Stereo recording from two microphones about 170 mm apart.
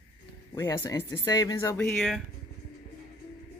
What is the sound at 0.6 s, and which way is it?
Speech, 15° left (ahead or behind).